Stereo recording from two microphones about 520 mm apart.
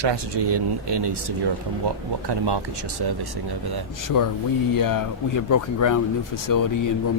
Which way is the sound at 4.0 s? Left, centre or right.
Left.